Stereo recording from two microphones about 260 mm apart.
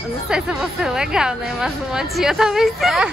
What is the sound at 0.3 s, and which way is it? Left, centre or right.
Speech, centre.